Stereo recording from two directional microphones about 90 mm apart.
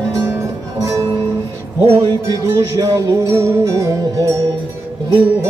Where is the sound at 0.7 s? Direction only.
40° right (ahead or behind).